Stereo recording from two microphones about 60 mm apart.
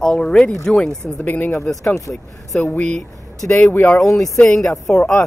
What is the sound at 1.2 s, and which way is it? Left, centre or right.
Speech, left.